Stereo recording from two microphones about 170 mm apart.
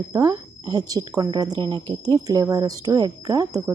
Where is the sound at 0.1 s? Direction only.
20° right (ahead or behind).